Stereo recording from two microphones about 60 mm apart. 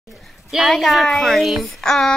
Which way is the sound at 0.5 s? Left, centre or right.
Centre.